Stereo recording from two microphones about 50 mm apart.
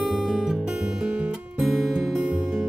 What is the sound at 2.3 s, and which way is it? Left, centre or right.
Music, right.